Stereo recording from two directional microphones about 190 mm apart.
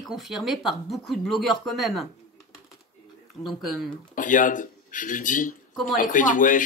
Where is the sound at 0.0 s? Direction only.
Centre (ahead or behind).